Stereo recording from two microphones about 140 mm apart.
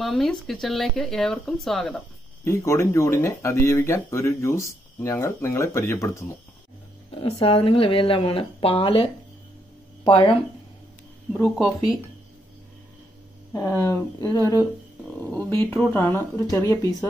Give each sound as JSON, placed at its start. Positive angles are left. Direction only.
{"t": 0.0, "sound": "speech", "side_deg": 0}
{"t": 2.4, "sound": "speech", "side_deg": 20}
{"t": 7.1, "sound": "speech", "side_deg": 45}
{"t": 11.3, "sound": "speech", "side_deg": 5}
{"t": 13.5, "sound": "speech", "side_deg": 20}
{"t": 15.1, "sound": "speech", "side_deg": 10}